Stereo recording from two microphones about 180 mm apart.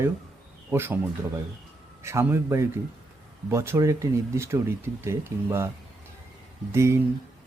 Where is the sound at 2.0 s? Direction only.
15° right (ahead or behind).